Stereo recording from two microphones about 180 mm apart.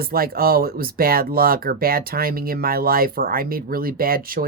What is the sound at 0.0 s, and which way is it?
Speech, 55° right (ahead or behind).